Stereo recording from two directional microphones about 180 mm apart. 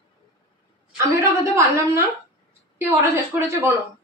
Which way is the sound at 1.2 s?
15° right (ahead or behind).